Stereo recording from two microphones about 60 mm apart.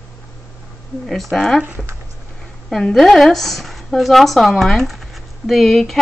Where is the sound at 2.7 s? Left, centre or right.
Centre.